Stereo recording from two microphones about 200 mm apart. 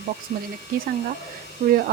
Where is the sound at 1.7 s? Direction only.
45° right (ahead or behind).